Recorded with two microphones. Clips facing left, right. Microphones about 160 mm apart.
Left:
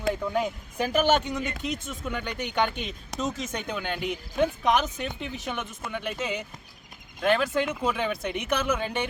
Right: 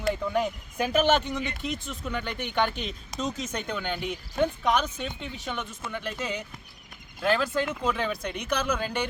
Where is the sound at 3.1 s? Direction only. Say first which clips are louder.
Left 2 dB; 70° left (ahead or behind).